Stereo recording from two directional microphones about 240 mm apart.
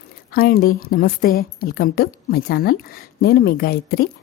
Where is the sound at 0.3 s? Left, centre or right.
Left.